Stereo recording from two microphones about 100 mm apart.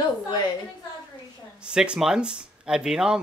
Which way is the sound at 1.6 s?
10° right (ahead or behind).